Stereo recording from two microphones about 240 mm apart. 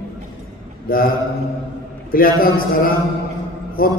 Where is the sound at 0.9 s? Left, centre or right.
Left.